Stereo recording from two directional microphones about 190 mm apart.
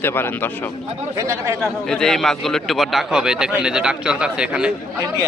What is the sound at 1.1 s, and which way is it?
Speech, 15° right (ahead or behind).